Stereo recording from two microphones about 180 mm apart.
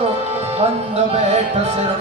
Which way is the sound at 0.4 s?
35° right (ahead or behind).